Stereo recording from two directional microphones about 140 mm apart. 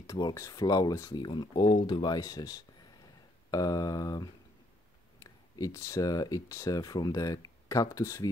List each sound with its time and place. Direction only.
0.0 s speech: 25° left (ahead or behind)